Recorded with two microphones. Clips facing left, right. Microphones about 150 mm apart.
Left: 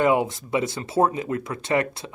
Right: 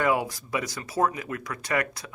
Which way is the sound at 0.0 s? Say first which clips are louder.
Left 5 dB; 25° left (ahead or behind).